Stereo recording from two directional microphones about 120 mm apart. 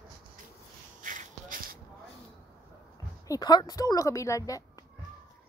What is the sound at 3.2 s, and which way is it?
A woman's voice, 35° left (ahead or behind).